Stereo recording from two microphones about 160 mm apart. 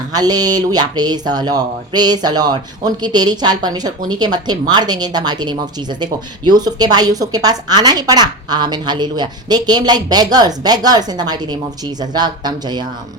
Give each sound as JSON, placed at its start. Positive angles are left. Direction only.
{"t": 0.1, "sound": "speech", "side_deg": -25}